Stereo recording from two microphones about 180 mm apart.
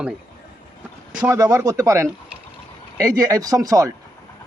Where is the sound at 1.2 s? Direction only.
20° right (ahead or behind).